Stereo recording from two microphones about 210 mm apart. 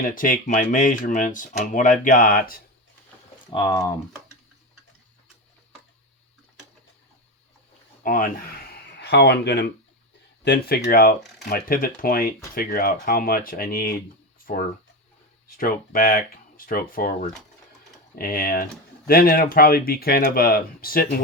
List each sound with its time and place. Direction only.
0.1 s speech: 40° left (ahead or behind)
3.5 s speech: 20° left (ahead or behind)
8.0 s speech: 40° left (ahead or behind)
8.7 s a sound: 55° left (ahead or behind)
10.4 s speech: 50° left (ahead or behind)
15.4 s speech: 40° left (ahead or behind)